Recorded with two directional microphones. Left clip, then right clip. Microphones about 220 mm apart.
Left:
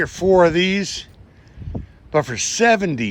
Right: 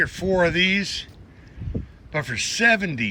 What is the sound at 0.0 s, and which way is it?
A man's voice, 15° left (ahead or behind).